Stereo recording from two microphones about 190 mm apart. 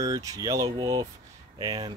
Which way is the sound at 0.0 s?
20° right (ahead or behind).